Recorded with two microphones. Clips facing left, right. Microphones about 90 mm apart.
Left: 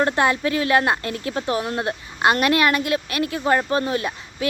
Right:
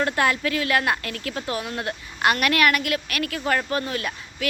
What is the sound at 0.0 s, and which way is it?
A woman's voice, 25° left (ahead or behind).